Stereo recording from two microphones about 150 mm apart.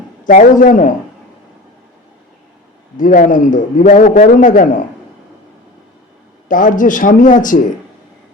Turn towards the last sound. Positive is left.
turn(degrees=60)  # may be behind; listen again after turning